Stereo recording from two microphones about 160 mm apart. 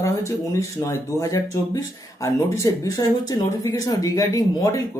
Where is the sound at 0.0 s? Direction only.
20° left (ahead or behind).